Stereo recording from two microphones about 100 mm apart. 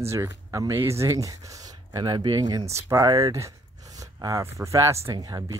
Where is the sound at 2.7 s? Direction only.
30° right (ahead or behind).